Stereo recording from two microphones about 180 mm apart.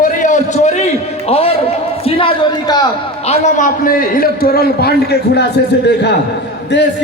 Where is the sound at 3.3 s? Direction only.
45° left (ahead or behind); by 5.4 s 60° left (ahead or behind).